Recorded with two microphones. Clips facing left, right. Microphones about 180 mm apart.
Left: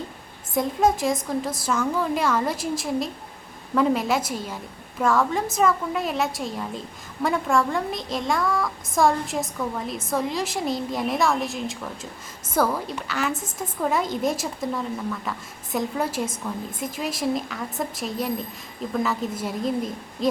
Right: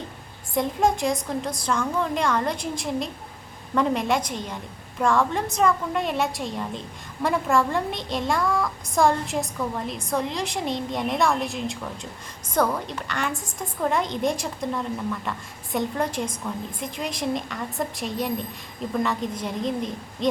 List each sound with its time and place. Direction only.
0.5 s a woman's voice: centre (ahead or behind)